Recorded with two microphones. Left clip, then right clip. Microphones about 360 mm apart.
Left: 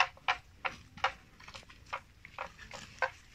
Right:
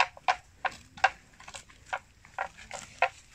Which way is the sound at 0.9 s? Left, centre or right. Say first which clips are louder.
Right 10 dB; centre.